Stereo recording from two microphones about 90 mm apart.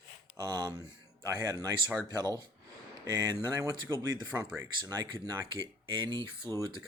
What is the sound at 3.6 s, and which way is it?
Speech, 35° right (ahead or behind).